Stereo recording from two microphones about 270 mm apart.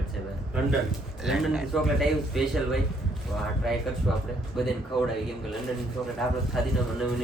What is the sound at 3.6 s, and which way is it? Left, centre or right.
A man's voice, centre.